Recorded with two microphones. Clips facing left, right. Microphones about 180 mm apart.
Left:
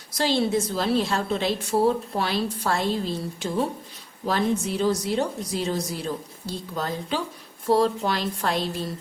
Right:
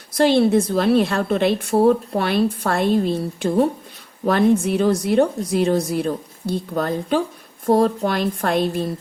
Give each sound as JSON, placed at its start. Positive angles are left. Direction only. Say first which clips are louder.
{"t": 0.2, "sound": "a woman's voice", "louder": "right 8 dB", "side_deg": -60}